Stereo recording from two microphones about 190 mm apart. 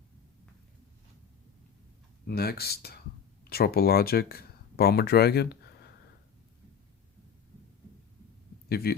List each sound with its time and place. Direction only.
2.2 s speech: 55° left (ahead or behind)
8.7 s speech: 55° left (ahead or behind)